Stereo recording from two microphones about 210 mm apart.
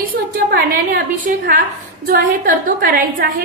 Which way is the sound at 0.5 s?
45° right (ahead or behind).